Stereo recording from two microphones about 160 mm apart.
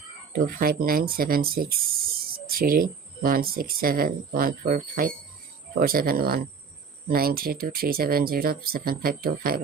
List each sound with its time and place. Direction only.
0.3 s speech: 65° right (ahead or behind)